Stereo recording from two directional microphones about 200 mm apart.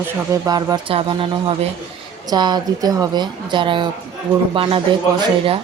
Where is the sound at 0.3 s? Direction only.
20° right (ahead or behind).